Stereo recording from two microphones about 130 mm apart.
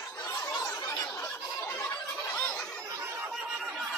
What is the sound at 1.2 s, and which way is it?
Fowl, 15° left (ahead or behind).